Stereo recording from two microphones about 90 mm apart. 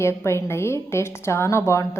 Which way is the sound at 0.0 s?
30° left (ahead or behind).